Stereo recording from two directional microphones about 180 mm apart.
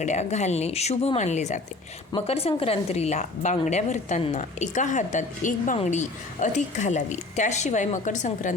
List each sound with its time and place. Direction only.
0.0 s a woman's voice: 40° left (ahead or behind)